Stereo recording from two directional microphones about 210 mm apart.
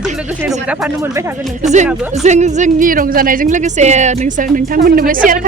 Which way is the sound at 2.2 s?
35° right (ahead or behind).